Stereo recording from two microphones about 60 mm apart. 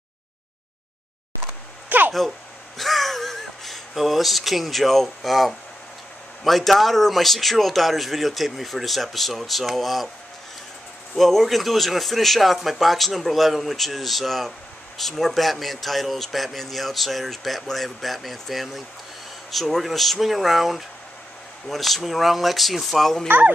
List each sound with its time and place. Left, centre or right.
1.9 s a sound: right
2.8 s a man's voice: centre
11.1 s a man's voice: centre
23.2 s speech: right